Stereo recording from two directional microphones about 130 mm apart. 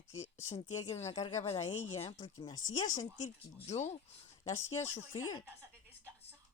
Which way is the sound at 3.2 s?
65° left (ahead or behind).